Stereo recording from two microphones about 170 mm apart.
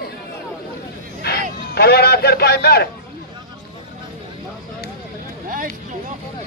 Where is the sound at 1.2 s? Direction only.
70° left (ahead or behind).